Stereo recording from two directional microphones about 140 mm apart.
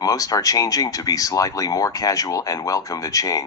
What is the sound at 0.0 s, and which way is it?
Speech, 25° left (ahead or behind).